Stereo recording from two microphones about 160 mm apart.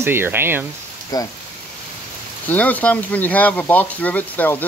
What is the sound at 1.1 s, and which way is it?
Speech, 25° left (ahead or behind).